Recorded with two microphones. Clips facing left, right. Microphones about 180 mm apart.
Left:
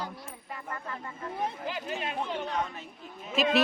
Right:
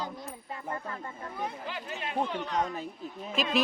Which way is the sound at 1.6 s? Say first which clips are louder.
Left 3 dB; 25° left (ahead or behind).